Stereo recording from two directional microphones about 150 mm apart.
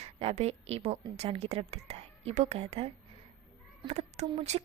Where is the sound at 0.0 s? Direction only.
40° right (ahead or behind).